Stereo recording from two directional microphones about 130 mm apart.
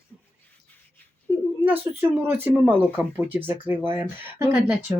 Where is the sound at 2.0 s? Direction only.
15° right (ahead or behind).